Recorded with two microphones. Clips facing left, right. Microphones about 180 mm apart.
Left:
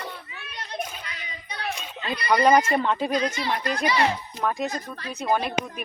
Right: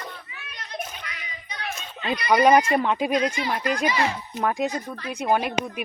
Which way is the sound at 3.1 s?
35° left (ahead or behind).